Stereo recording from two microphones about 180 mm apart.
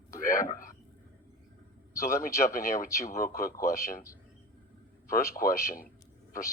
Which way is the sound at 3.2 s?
55° left (ahead or behind).